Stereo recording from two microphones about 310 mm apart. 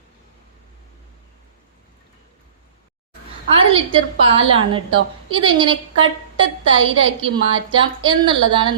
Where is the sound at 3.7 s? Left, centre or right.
Centre.